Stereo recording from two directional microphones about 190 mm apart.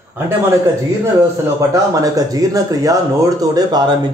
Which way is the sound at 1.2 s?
15° right (ahead or behind).